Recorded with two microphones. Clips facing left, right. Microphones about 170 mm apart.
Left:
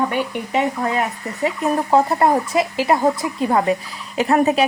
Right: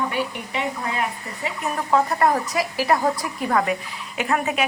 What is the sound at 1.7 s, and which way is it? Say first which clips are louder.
Speech: left 3 dB; 30° left (ahead or behind).